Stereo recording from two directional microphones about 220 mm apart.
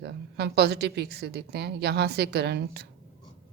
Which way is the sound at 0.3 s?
50° right (ahead or behind).